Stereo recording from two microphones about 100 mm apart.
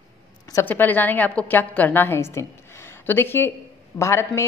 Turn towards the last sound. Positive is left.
turn(degrees=30)  # may be behind; listen again after turning